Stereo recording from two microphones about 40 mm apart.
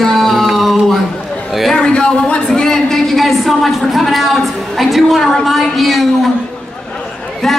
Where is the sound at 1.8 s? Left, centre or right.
Left.